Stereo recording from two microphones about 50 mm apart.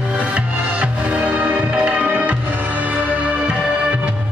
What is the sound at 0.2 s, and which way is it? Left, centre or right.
Music, right.